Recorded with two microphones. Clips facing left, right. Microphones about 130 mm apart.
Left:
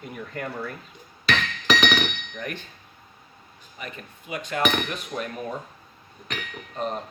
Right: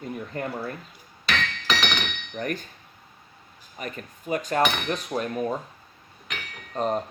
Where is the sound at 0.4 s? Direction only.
30° right (ahead or behind).